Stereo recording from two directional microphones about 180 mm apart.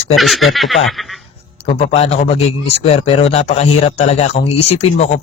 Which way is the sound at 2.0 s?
35° left (ahead or behind).